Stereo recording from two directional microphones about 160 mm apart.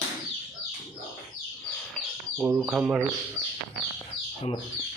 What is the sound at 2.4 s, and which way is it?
Speech, 15° right (ahead or behind).